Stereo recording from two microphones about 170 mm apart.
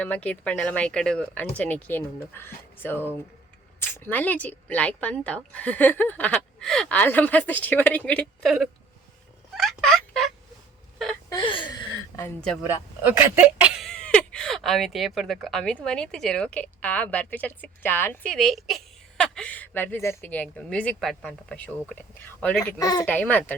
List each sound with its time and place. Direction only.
0.0 s speech: 10° left (ahead or behind)
9.6 s turkey: centre (ahead or behind)
10.9 s whimper: centre (ahead or behind)
11.3 s a sound: 30° left (ahead or behind)
12.6 s speech: 10° right (ahead or behind); by 22.7 s 10° left (ahead or behind)
22.8 s speech: 20° left (ahead or behind)
23.0 s speech: 10° left (ahead or behind)